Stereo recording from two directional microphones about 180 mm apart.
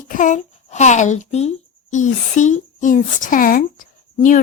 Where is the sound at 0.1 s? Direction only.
45° left (ahead or behind).